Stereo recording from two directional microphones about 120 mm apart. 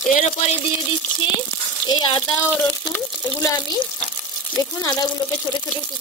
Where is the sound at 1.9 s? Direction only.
40° left (ahead or behind).